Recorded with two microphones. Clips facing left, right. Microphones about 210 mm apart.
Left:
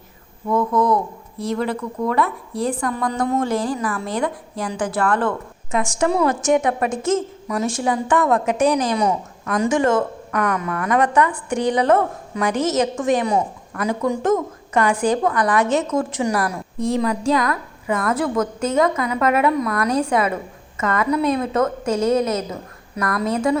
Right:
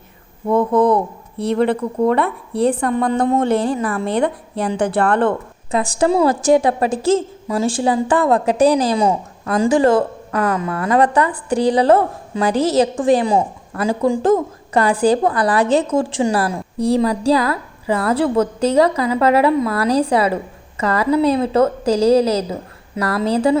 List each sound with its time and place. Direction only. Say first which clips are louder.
0.4 s a woman's voice: right 4 dB; 30° right (ahead or behind)
1.4 s speech: right 5 dB; 60° right (ahead or behind)
1.7 s a woman's voice: right 5 dB; 30° right (ahead or behind)
2.2 s speech: right 6 dB; 65° right (ahead or behind)
2.8 s a woman's voice: right 5 dB; 25° right (ahead or behind)
3.4 s speech: right 5 dB; 60° right (ahead or behind)
3.7 s a woman's voice: right 4 dB; 30° right (ahead or behind)
4.1 s speech: right 5 dB; 60° right (ahead or behind)
5.7 s a woman's voice: right 4 dB; 35° right (ahead or behind)